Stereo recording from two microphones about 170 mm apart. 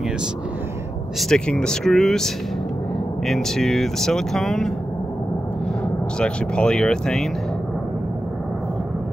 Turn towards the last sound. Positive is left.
turn(degrees=5)  # may be behind; listen again after turning